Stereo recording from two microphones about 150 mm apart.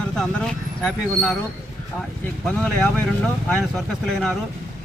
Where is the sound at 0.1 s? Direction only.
5° left (ahead or behind).